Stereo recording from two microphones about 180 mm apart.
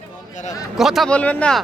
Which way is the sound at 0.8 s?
Centre (ahead or behind).